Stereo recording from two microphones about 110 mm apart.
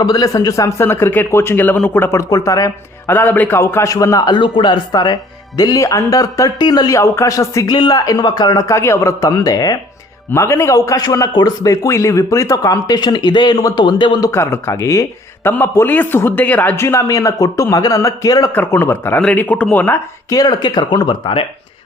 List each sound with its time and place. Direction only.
0.0 s a man's voice: 35° left (ahead or behind)
3.1 s a man's voice: 20° left (ahead or behind); by 4.4 s 35° left (ahead or behind)
4.4 s a man's voice: 50° left (ahead or behind)
10.3 s a man's voice: 25° left (ahead or behind); by 14.3 s 45° left (ahead or behind)
14.3 s a man's voice: 25° left (ahead or behind)
18.5 s a man's voice: 20° left (ahead or behind)
20.3 s speech: 40° left (ahead or behind)